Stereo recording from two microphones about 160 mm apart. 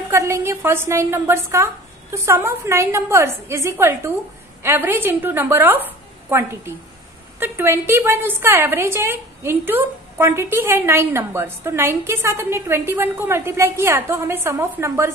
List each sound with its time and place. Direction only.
0.1 s a woman's voice: 15° right (ahead or behind)
7.3 s a woman's voice: 15° right (ahead or behind)